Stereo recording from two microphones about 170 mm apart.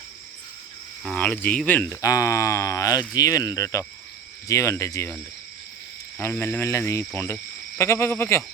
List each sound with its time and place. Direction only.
1.0 s speech: 5° left (ahead or behind)
2.0 s speech: 20° left (ahead or behind)
6.1 s speech: 15° left (ahead or behind)